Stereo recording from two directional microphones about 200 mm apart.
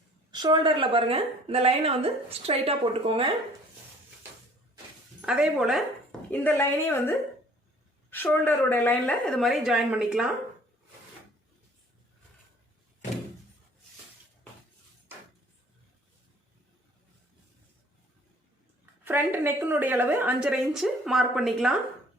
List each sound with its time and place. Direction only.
0.3 s a woman's voice: 20° right (ahead or behind)
5.2 s speech: 5° right (ahead or behind)
8.1 s a woman's voice: 10° left (ahead or behind)
19.0 s a woman's voice: 10° right (ahead or behind)